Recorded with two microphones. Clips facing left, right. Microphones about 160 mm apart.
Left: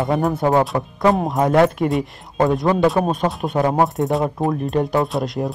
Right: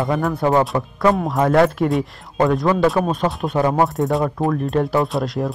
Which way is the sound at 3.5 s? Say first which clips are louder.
Even; 20° left (ahead or behind).